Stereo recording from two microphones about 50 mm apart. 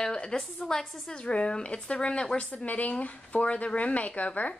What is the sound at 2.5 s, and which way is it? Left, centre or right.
A woman's voice, left.